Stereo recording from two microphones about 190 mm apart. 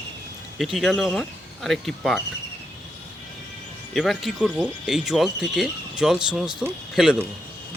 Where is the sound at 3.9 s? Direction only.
Centre (ahead or behind).